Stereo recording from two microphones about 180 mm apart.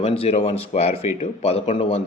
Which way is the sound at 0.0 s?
35° left (ahead or behind).